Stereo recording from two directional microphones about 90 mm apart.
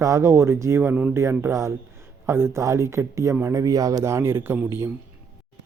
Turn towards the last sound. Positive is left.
turn(degrees=-25)  # may be behind; listen again after turning